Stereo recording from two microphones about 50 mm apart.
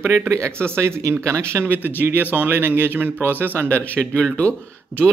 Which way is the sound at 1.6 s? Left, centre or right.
Right.